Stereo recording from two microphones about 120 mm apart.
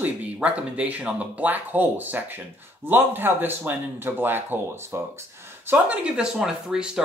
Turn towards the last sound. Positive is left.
turn(degrees=-5)  # may be behind; listen again after turning